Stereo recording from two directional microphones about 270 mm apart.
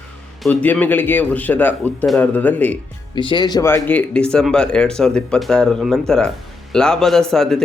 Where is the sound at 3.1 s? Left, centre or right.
Centre.